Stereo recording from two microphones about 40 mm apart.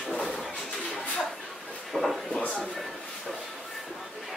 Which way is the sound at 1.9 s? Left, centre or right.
Centre.